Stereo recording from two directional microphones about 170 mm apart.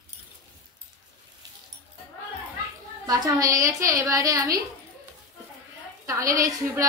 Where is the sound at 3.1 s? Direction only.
20° right (ahead or behind).